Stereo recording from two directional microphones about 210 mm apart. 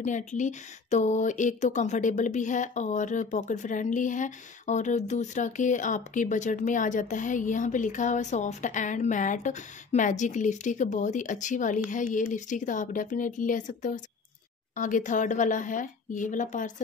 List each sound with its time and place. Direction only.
0.0 s speech: 35° left (ahead or behind)